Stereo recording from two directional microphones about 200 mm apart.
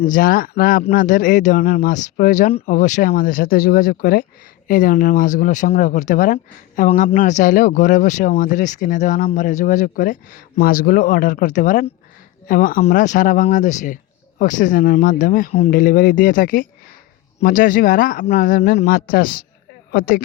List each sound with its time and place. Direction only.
0.0 s speech: 40° left (ahead or behind)